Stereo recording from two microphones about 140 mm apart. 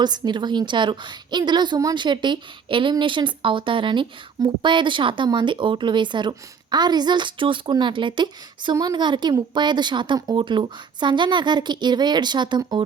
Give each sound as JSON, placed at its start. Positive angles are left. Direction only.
{"t": 0.0, "sound": "speech", "side_deg": -30}